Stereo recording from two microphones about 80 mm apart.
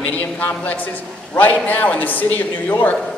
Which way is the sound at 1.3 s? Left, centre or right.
Left.